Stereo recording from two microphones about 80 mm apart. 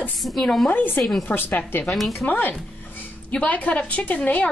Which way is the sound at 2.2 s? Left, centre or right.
Centre.